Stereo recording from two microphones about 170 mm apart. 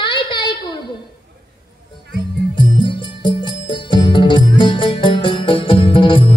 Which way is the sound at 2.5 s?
30° left (ahead or behind).